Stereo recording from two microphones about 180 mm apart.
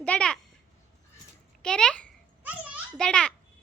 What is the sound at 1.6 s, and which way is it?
Babbling, 5° left (ahead or behind).